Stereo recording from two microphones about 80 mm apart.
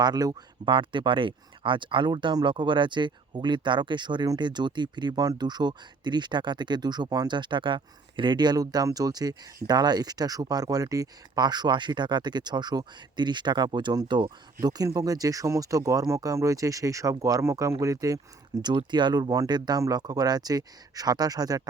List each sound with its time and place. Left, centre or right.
0.0 s speech: right
0.7 s speech: right
18.6 s speech: right